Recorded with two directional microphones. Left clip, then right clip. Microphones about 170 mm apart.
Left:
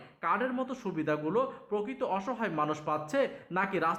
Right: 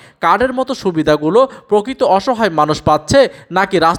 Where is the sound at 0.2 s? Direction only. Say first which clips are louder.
Right 18 dB; 45° right (ahead or behind).